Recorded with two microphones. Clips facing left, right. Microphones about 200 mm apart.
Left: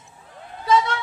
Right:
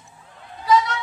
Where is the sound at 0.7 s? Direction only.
25° left (ahead or behind).